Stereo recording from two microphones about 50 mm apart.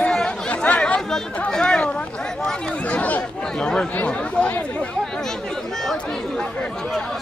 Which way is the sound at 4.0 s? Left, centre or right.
Left.